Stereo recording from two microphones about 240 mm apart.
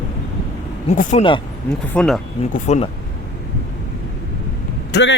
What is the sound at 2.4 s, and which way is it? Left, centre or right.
Speech, left.